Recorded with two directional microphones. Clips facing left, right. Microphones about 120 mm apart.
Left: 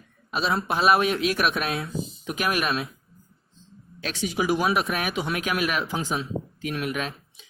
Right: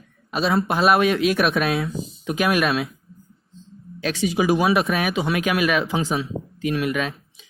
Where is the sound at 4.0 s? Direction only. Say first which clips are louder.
Right 6 dB; 90° right.